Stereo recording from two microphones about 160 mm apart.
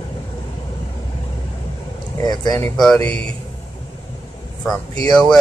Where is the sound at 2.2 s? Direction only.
25° left (ahead or behind).